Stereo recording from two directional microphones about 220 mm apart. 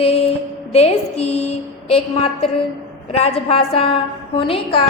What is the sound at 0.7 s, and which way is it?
A woman's voice, 30° left (ahead or behind).